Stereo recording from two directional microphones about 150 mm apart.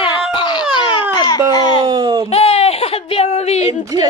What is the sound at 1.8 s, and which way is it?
Speech, 25° right (ahead or behind).